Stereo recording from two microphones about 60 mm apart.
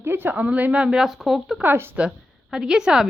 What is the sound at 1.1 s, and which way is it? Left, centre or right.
Speech, centre.